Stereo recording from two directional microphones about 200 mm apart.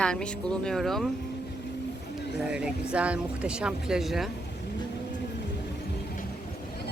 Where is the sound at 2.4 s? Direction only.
5° right (ahead or behind).